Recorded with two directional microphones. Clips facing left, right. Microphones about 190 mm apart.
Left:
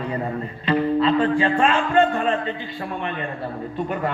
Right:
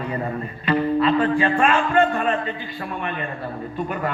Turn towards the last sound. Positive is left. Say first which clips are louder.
# left 1 dB
turn(degrees=25)  # may be behind; listen again after turning